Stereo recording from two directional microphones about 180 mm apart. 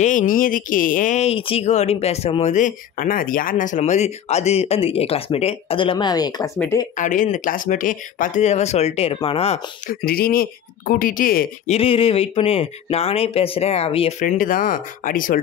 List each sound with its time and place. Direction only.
0.0 s speech: 45° left (ahead or behind); by 6.5 s 20° left (ahead or behind)
7.0 s speech: 45° left (ahead or behind)
9.8 s speech: 55° left (ahead or behind)
11.6 s speech: 35° left (ahead or behind)
14.2 s speech: 50° left (ahead or behind)